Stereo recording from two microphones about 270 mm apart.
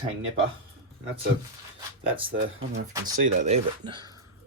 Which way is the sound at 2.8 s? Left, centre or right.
Right.